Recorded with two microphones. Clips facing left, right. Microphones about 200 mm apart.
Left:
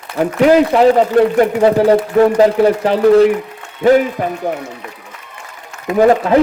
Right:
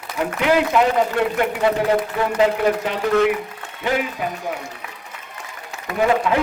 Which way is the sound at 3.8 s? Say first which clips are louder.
Left 12 dB; 45° left (ahead or behind).